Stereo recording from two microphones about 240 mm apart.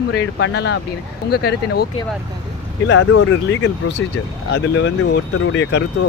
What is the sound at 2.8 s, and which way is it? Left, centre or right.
Speech, left.